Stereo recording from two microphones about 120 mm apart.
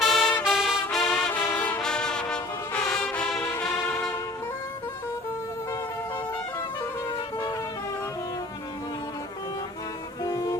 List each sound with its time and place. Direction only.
0.0 s music: centre (ahead or behind)
1.1 s brass instrument: 15° left (ahead or behind)
3.6 s music: 5° left (ahead or behind)
7.1 s music: 35° left (ahead or behind)
10.2 s music: 25° left (ahead or behind)